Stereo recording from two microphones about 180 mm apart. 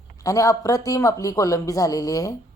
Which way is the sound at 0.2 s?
20° left (ahead or behind).